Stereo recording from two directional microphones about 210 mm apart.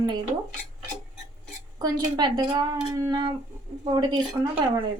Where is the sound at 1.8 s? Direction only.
20° right (ahead or behind).